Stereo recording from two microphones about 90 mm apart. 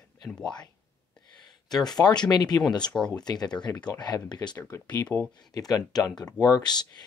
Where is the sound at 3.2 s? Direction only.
50° left (ahead or behind).